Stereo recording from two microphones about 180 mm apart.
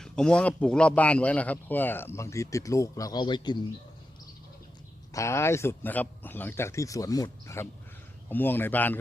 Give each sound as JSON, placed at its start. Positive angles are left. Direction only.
{"t": 0.0, "sound": "speech", "side_deg": 5}
{"t": 5.1, "sound": "speech", "side_deg": 15}